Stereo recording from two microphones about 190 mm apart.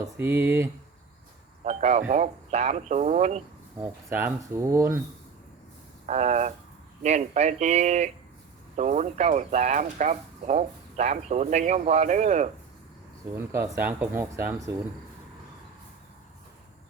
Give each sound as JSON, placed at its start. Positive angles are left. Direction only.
{"t": 0.0, "sound": "speech", "side_deg": -15}
{"t": 1.6, "sound": "speech", "side_deg": -40}
{"t": 4.1, "sound": "speech", "side_deg": -15}
{"t": 6.1, "sound": "speech", "side_deg": -40}
{"t": 13.3, "sound": "speech", "side_deg": -15}